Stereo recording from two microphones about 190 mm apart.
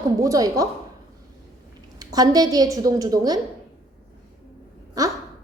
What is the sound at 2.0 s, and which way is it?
A woman's voice, 20° right (ahead or behind).